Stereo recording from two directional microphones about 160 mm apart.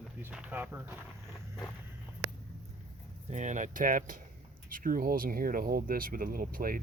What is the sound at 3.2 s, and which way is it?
Speech, 50° right (ahead or behind).